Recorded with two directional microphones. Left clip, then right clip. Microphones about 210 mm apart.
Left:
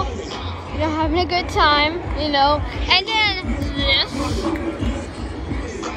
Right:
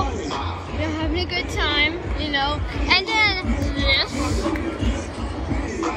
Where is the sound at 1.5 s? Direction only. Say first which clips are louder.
Left 5 dB; 15° left (ahead or behind).